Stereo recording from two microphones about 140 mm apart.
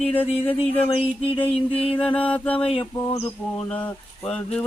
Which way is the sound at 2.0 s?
10° left (ahead or behind).